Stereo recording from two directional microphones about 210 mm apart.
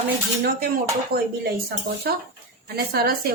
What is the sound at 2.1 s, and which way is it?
A woman's voice, 50° right (ahead or behind).